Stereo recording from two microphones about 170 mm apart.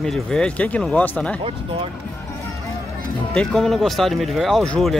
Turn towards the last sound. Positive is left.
turn(degrees=5)  # may be behind; listen again after turning